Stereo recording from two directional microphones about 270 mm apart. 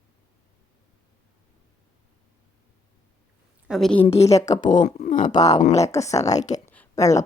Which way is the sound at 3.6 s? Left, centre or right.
Centre.